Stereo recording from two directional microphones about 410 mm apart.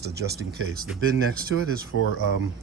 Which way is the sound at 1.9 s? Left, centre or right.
Left.